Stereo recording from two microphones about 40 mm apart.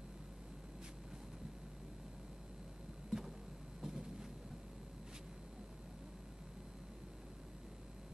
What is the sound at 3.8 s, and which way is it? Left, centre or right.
Vehicle, centre.